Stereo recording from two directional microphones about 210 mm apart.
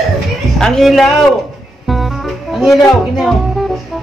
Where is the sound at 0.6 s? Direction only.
Centre (ahead or behind).